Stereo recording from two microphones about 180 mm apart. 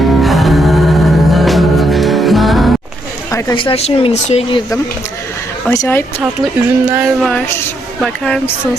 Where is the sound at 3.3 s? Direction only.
15° left (ahead or behind).